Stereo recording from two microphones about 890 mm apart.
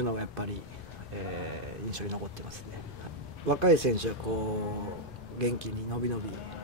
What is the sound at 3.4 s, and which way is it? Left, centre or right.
Speech, right.